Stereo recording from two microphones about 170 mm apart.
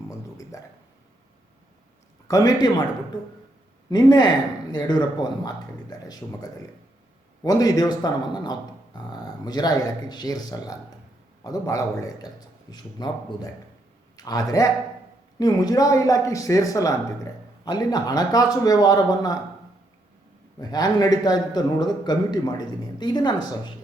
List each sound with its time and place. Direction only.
0.5 s speech: 20° left (ahead or behind)
2.2 s a man's voice: 20° left (ahead or behind)
3.8 s a man's voice: 25° left (ahead or behind)
20.6 s a man's voice: 25° left (ahead or behind)